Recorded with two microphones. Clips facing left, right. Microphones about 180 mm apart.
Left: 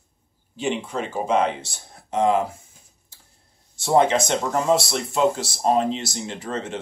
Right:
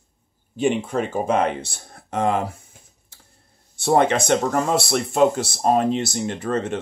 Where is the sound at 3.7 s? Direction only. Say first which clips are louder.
Even; 60° right (ahead or behind).